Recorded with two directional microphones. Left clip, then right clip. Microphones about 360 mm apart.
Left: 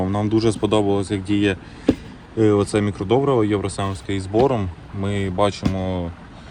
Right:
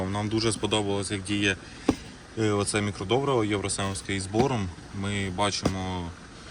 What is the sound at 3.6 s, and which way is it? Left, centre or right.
Speech, centre.